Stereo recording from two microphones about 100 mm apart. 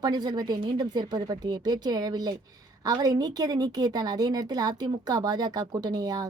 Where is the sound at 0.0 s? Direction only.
45° right (ahead or behind).